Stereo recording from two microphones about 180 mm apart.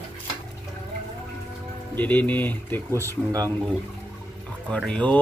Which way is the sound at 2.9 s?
15° right (ahead or behind).